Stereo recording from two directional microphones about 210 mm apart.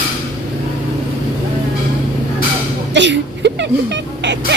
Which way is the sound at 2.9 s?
55° right (ahead or behind).